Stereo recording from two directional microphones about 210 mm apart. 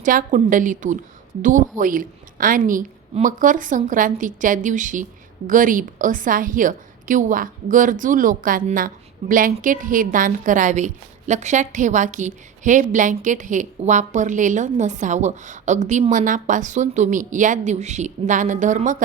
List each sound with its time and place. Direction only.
0.0 s a woman's voice: 40° right (ahead or behind)